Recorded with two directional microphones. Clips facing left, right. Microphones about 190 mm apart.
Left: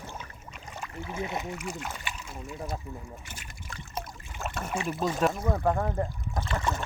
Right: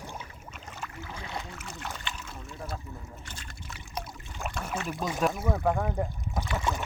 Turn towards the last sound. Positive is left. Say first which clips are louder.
# even
turn(degrees=-5)  # may be behind; listen again after turning